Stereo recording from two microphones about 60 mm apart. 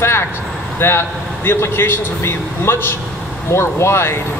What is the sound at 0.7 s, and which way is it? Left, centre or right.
A man's voice, left.